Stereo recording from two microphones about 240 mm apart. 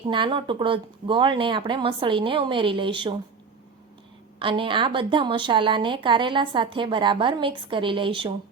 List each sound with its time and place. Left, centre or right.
0.1 s a woman's voice: centre
4.4 s a woman's voice: right